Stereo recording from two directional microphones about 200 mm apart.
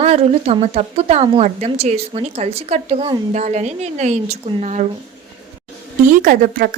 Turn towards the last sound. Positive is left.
turn(degrees=-45)  # may be behind; listen again after turning